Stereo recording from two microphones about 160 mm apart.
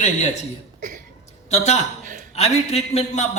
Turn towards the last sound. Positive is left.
turn(degrees=45)  # may be behind; listen again after turning